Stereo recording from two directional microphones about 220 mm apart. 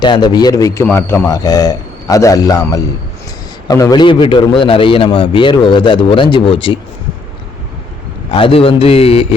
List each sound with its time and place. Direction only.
0.0 s a man's voice: 20° left (ahead or behind)
8.3 s a man's voice: 25° left (ahead or behind)